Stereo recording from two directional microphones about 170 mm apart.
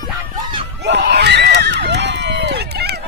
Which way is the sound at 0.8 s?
75° right (ahead or behind).